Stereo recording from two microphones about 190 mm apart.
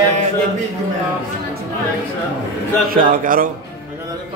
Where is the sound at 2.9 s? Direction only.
45° right (ahead or behind).